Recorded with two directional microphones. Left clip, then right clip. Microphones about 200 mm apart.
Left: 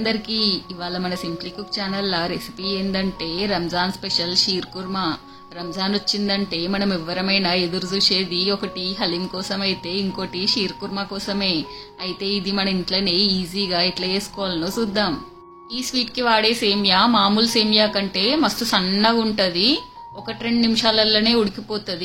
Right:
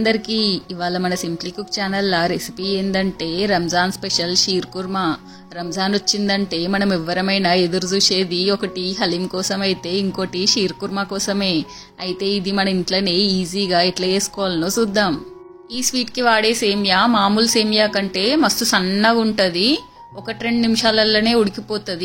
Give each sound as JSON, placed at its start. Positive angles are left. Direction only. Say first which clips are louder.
{"t": 0.0, "sound": "a woman's voice", "louder": "right 3 dB", "side_deg": -30}